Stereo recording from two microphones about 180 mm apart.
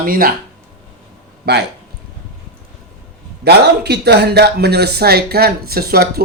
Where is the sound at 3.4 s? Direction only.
65° right (ahead or behind).